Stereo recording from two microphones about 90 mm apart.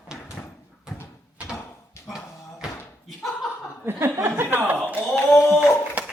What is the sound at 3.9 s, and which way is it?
Chuckle, 25° right (ahead or behind).